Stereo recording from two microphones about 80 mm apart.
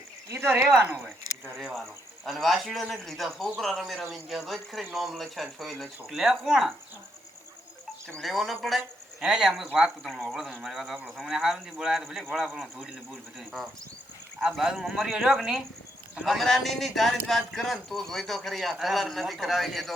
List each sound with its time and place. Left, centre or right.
0.3 s speech: right
1.5 s a man's voice: centre
8.2 s a man's voice: centre
14.4 s a man's voice: centre